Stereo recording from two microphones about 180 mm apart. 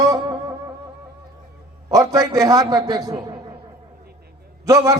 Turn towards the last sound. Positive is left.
turn(degrees=-20)  # may be behind; listen again after turning